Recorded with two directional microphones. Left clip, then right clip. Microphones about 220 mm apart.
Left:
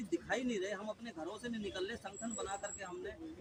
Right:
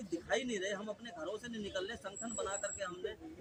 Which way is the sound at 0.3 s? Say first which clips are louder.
Right 4 dB; 20° right (ahead or behind).